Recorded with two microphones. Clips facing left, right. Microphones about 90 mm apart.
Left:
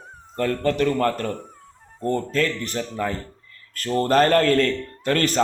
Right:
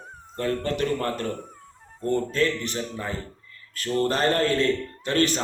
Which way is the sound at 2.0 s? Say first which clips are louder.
Left 2 dB; 35° left (ahead or behind).